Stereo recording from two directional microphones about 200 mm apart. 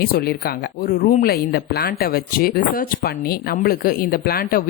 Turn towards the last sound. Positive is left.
turn(degrees=50)  # may be behind; listen again after turning